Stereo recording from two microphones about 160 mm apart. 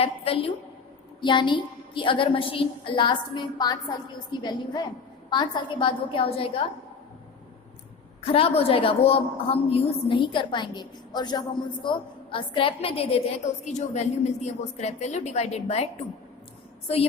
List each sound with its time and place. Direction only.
0.0 s a woman's voice: 35° left (ahead or behind)
8.2 s a woman's voice: 35° left (ahead or behind)